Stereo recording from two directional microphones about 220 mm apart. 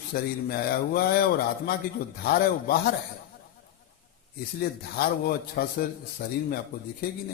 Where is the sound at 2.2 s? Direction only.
45° left (ahead or behind).